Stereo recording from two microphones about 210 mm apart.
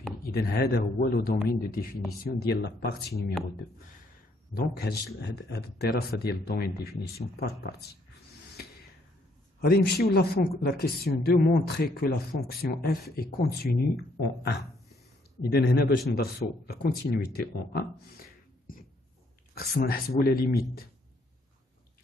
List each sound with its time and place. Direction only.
0.2 s speech: 50° left (ahead or behind)
4.6 s speech: 50° left (ahead or behind)
9.6 s speech: 45° left (ahead or behind)